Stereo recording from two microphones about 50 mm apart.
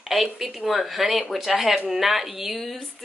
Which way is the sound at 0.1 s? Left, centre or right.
Centre.